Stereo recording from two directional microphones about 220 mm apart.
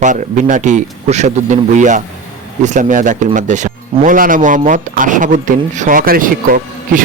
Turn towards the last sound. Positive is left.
turn(degrees=-40)  # may be behind; listen again after turning